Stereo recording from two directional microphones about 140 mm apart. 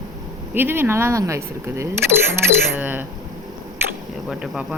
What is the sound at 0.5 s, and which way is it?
Speech, 15° right (ahead or behind).